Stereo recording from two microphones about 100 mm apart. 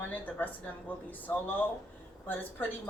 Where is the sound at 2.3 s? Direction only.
20° left (ahead or behind).